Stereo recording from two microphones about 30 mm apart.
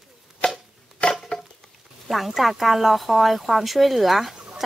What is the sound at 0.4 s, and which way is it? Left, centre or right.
Chopping, left.